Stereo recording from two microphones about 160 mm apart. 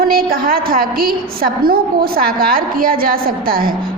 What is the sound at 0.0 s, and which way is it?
A woman's voice, 65° right (ahead or behind).